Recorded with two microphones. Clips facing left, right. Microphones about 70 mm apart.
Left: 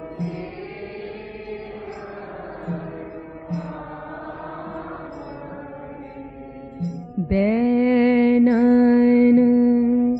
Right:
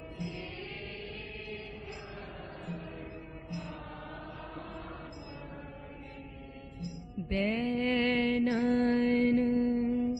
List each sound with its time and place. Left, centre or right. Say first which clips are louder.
6.8 s music: left 14 dB; left